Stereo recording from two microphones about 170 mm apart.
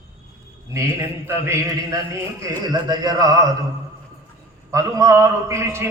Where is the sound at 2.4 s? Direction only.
25° right (ahead or behind).